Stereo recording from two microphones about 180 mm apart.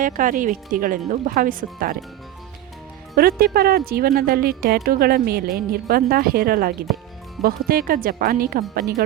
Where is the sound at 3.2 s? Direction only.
55° right (ahead or behind).